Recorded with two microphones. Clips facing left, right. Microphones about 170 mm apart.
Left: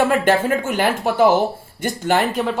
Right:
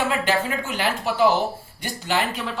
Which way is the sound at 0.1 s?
50° left (ahead or behind).